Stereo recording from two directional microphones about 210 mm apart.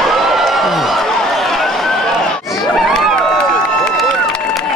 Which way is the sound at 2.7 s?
Centre (ahead or behind).